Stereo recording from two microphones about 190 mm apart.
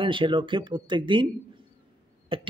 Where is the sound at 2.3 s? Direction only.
30° right (ahead or behind).